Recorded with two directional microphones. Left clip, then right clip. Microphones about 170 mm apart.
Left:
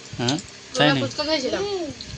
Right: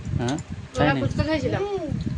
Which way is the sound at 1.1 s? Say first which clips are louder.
Left 2 dB; 25° right (ahead or behind).